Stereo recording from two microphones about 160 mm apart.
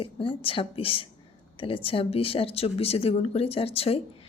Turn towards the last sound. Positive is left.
turn(degrees=40)  # may be behind; listen again after turning